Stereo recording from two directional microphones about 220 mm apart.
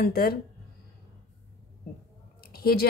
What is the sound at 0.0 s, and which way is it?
Speech, 45° left (ahead or behind).